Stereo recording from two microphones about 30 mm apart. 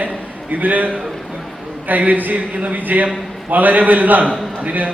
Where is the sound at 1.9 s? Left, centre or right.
Right.